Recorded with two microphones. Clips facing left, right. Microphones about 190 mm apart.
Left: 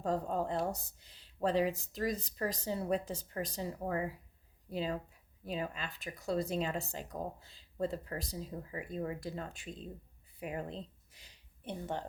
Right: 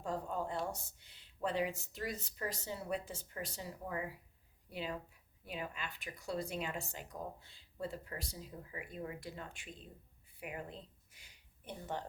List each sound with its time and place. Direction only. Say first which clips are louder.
0.0 s speech: left 5 dB; 40° left (ahead or behind)